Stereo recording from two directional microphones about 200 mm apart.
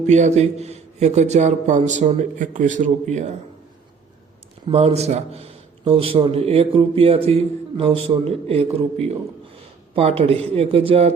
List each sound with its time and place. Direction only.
0.0 s a man's voice: 35° right (ahead or behind)
4.7 s a man's voice: 30° right (ahead or behind)